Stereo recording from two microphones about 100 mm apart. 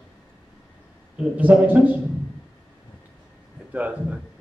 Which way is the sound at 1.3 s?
15° right (ahead or behind).